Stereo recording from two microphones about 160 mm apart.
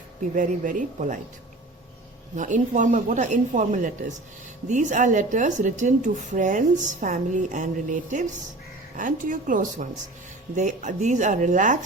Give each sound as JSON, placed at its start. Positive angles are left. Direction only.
{"t": 0.3, "sound": "a woman's voice", "side_deg": -55}
{"t": 2.3, "sound": "a woman's voice", "side_deg": -50}